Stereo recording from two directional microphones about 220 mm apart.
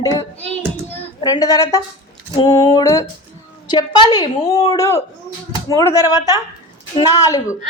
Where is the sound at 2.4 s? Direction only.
15° left (ahead or behind).